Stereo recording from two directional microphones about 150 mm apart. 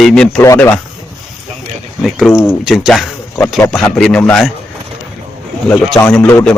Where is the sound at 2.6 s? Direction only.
Centre (ahead or behind).